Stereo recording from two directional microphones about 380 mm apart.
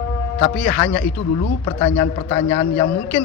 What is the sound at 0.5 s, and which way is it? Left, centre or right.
Speech, centre.